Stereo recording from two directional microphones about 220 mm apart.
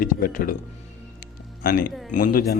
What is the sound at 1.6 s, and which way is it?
Speech, 40° left (ahead or behind).